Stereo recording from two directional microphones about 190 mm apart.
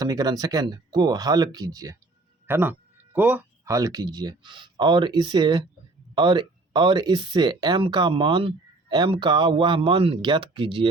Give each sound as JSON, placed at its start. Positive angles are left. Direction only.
{"t": 0.0, "sound": "speech", "side_deg": -20}